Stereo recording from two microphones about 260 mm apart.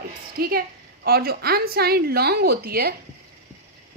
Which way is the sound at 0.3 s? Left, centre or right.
Right.